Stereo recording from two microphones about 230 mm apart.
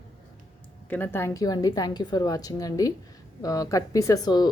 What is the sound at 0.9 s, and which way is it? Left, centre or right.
A woman's voice, centre.